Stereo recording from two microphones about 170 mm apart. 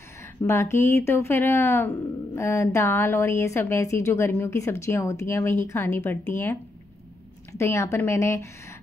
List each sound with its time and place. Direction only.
0.4 s speech: 15° left (ahead or behind)